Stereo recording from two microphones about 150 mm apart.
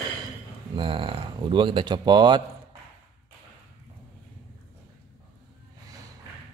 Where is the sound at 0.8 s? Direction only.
35° right (ahead or behind).